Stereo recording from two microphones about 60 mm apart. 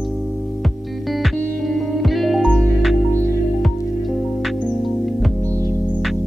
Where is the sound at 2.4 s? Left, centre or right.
Centre.